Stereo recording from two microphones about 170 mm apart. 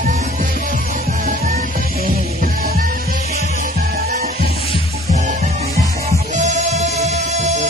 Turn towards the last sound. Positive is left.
turn(degrees=-45)  # may be behind; listen again after turning